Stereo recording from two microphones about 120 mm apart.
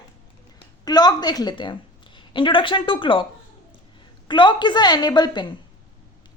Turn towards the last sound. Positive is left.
turn(degrees=35)  # may be behind; listen again after turning